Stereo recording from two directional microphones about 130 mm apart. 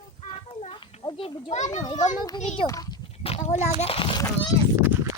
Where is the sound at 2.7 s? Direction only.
30° left (ahead or behind).